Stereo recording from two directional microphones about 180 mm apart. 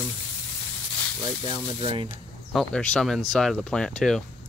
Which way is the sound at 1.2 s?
25° right (ahead or behind).